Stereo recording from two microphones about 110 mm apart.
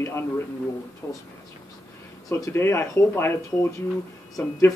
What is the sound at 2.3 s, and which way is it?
Speech, 30° left (ahead or behind).